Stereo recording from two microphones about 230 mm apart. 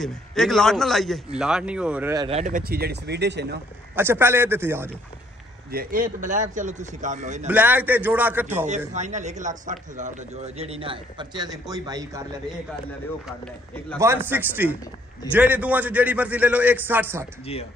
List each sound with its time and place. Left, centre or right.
0.0 s a man's voice: centre
2.2 s speech: right
3.9 s a man's voice: centre
5.7 s speech: right
7.4 s a man's voice: centre
8.6 s a man's voice: right; by 12.4 s centre
13.9 s a man's voice: centre